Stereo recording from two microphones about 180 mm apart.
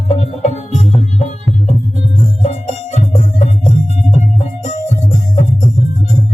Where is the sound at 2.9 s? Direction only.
35° left (ahead or behind).